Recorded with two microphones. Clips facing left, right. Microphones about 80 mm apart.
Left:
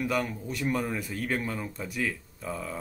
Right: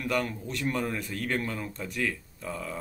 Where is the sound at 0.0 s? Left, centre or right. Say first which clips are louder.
Even; centre.